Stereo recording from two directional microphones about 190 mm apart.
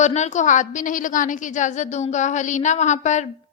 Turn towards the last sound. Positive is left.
turn(degrees=40)  # may be behind; listen again after turning